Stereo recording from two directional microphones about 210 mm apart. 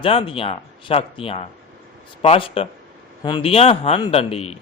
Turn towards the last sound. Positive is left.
turn(degrees=30)  # may be behind; listen again after turning